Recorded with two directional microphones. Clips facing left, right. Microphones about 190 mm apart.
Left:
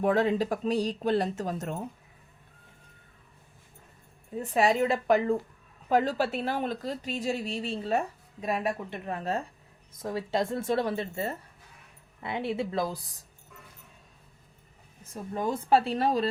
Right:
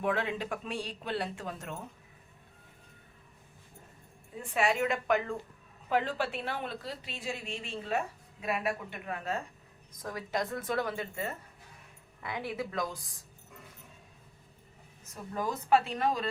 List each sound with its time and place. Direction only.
0.0 s a woman's voice: 40° left (ahead or behind)
4.4 s a woman's voice: 35° left (ahead or behind)
15.0 s a woman's voice: 25° left (ahead or behind)